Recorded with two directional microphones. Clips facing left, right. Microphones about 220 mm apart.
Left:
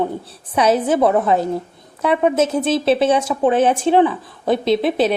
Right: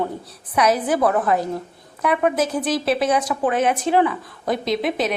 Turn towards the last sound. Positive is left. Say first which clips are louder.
# left 5 dB
turn(degrees=30)  # may be behind; listen again after turning